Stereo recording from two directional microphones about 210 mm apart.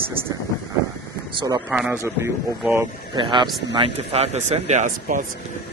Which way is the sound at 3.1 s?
20° right (ahead or behind).